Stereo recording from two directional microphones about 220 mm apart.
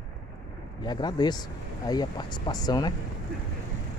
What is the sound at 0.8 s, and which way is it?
Speech, 20° left (ahead or behind).